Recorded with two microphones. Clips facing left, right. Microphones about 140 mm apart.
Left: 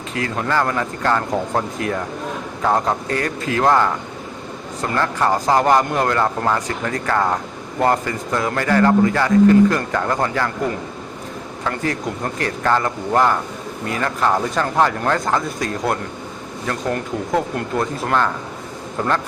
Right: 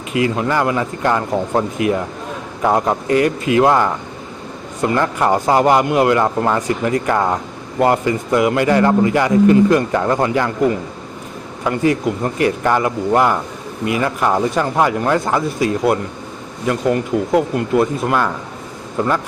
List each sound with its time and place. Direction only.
0.1 s a man's voice: 15° right (ahead or behind)
11.6 s a man's voice: 15° right (ahead or behind)